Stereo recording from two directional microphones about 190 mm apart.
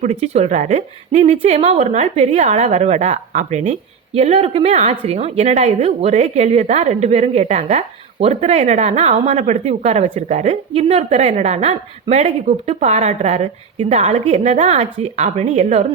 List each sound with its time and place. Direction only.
0.0 s a woman's voice: 35° right (ahead or behind)